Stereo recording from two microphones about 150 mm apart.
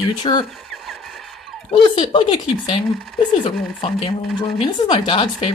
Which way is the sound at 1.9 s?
35° left (ahead or behind).